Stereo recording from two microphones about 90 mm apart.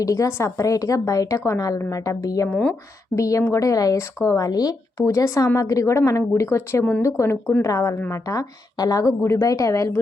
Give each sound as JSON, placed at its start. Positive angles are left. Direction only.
{"t": 0.0, "sound": "speech", "side_deg": 40}
{"t": 2.5, "sound": "speech", "side_deg": 10}
{"t": 3.2, "sound": "speech", "side_deg": 35}